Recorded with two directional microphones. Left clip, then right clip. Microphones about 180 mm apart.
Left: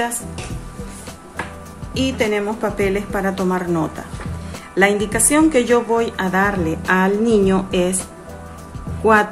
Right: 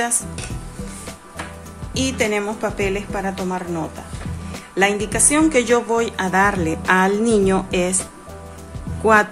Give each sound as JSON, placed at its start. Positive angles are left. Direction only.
{"t": 2.0, "sound": "a woman's voice", "side_deg": -20}
{"t": 4.7, "sound": "a woman's voice", "side_deg": -10}
{"t": 9.0, "sound": "a woman's voice", "side_deg": -15}